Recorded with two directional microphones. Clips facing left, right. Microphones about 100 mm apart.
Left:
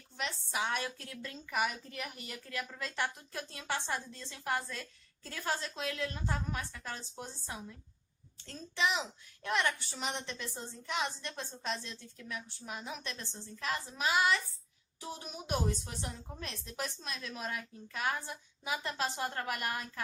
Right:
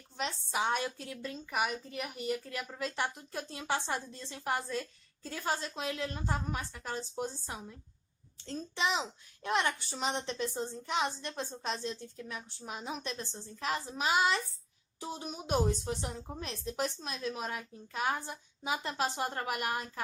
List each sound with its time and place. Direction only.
0.2 s a child's voice: 30° right (ahead or behind)
0.9 s a woman's voice: 15° right (ahead or behind)
5.6 s a child's voice: 25° right (ahead or behind)